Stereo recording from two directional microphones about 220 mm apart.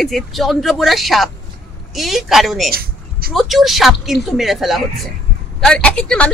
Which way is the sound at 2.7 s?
40° right (ahead or behind).